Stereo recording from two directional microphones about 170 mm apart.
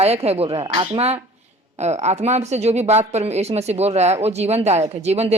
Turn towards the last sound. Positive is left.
turn(degrees=-40)  # may be behind; listen again after turning